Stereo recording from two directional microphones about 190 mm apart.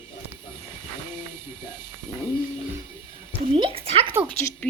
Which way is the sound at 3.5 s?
30° right (ahead or behind).